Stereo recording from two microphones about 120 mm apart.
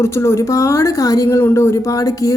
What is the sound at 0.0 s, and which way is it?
A woman's voice, 25° left (ahead or behind).